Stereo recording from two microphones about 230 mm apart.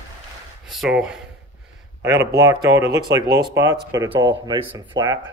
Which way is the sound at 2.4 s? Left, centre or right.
Centre.